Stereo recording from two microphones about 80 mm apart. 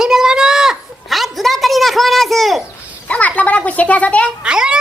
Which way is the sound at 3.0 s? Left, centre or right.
Centre.